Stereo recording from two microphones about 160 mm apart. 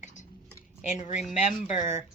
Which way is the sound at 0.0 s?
50° left (ahead or behind).